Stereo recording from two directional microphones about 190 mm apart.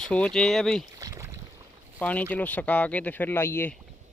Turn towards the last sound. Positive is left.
turn(degrees=10)  # may be behind; listen again after turning